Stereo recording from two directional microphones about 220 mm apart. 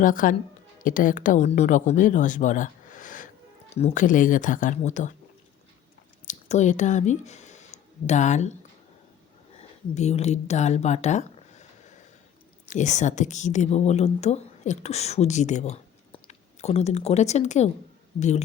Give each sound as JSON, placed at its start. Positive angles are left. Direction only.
{"t": 0.0, "sound": "speech", "side_deg": 40}
{"t": 6.2, "sound": "speech", "side_deg": 30}
{"t": 9.6, "sound": "speech", "side_deg": 30}
{"t": 12.7, "sound": "a woman's voice", "side_deg": 35}